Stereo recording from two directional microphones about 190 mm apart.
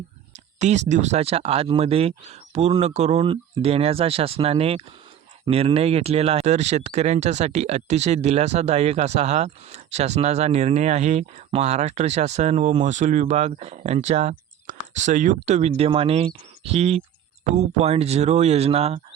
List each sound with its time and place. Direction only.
0.6 s speech: 35° right (ahead or behind)